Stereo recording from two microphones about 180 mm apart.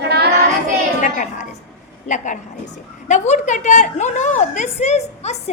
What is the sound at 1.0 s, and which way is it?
A woman's voice, 45° left (ahead or behind).